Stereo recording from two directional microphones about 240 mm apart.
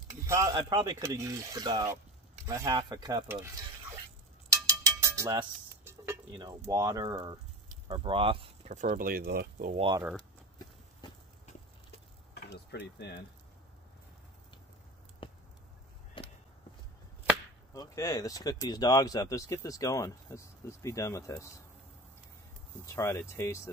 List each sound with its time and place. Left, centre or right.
0.1 s speech: centre
4.5 s a sound: centre
7.9 s speech: right
9.8 s speech: centre
11.0 s clip-clop: centre
12.4 s a sound: left
15.2 s a sound: left
17.7 s speech: centre
22.8 s speech: centre